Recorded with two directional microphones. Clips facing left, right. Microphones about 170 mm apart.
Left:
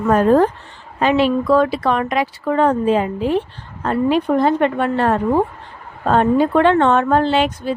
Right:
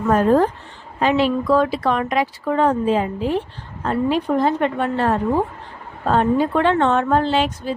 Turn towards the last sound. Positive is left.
turn(degrees=65)  # may be behind; listen again after turning